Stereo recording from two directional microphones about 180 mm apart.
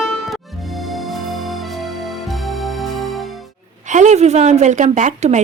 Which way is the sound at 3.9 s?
40° right (ahead or behind).